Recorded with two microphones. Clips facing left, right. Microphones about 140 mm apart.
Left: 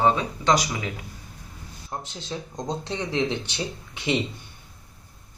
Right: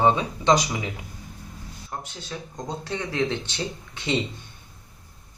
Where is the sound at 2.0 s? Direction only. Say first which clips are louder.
Left 2 dB; 20° left (ahead or behind).